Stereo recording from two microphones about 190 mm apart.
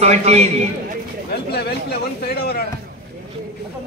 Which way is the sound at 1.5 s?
55° left (ahead or behind).